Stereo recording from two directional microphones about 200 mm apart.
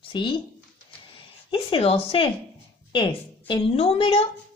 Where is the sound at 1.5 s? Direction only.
25° left (ahead or behind).